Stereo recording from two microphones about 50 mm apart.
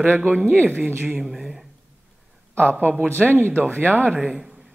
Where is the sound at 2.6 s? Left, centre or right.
Right.